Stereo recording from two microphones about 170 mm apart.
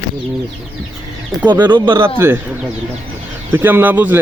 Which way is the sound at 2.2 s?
15° right (ahead or behind).